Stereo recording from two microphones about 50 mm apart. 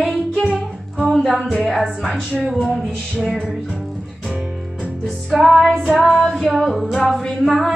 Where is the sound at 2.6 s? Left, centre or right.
Centre.